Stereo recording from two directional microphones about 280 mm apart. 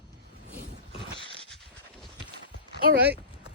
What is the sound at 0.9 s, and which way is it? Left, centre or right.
Dog, centre.